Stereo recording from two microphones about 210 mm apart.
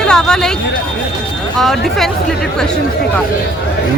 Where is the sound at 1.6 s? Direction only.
Centre (ahead or behind).